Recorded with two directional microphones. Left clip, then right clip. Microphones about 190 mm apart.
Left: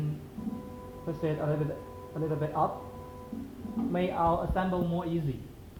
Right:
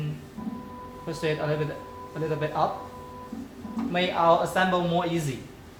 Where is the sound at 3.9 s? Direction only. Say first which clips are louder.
Right 7 dB; centre (ahead or behind).